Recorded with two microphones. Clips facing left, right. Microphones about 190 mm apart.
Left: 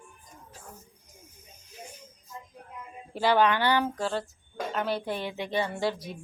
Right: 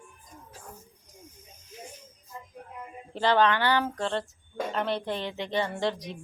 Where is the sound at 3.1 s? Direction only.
10° left (ahead or behind).